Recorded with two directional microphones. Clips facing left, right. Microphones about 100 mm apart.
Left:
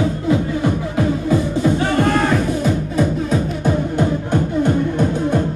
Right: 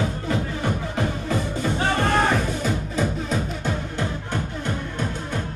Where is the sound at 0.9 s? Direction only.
10° left (ahead or behind).